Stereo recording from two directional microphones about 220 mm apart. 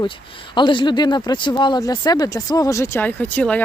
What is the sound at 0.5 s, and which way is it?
Speech, 20° left (ahead or behind).